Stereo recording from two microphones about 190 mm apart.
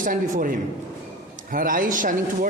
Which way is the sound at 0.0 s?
45° right (ahead or behind).